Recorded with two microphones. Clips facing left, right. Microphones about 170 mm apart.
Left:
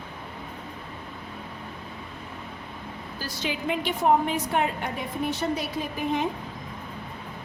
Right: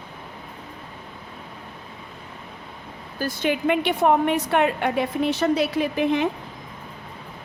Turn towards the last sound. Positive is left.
turn(degrees=-75)  # may be behind; listen again after turning